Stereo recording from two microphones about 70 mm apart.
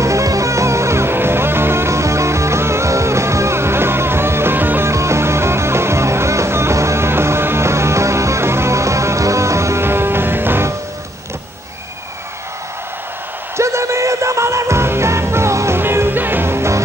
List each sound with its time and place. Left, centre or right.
0.0 s music: right
4.8 s music: right
13.6 s music: right